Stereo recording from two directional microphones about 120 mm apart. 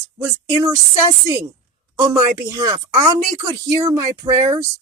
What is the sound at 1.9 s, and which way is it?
Speech, 30° right (ahead or behind).